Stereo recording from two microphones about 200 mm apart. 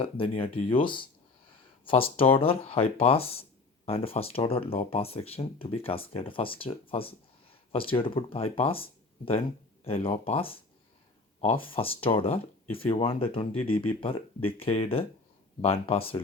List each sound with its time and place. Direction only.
0.0 s speech: 25° left (ahead or behind)